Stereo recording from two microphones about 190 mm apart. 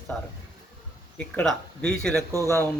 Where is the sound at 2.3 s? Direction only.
15° right (ahead or behind).